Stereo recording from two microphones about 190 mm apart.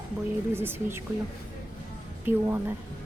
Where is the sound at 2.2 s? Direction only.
10° right (ahead or behind).